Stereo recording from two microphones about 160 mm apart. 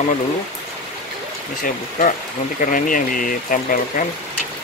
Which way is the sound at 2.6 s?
55° left (ahead or behind).